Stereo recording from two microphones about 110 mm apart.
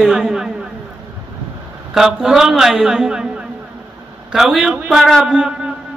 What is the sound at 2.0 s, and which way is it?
A man's voice, 5° right (ahead or behind).